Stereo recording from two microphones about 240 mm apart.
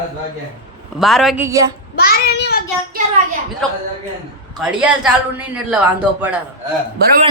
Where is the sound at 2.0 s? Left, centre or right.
Left.